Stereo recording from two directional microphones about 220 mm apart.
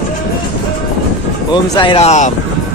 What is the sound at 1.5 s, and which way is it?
Speech, 20° left (ahead or behind).